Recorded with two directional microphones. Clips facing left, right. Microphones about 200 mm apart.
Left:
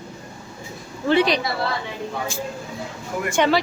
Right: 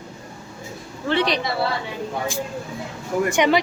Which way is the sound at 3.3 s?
15° right (ahead or behind).